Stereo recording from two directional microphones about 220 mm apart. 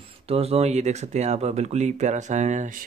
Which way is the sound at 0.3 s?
30° right (ahead or behind).